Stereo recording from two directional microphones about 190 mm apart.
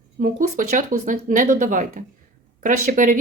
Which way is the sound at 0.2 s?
45° right (ahead or behind).